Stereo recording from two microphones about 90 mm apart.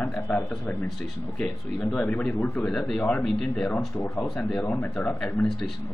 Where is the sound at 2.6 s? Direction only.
5° left (ahead or behind).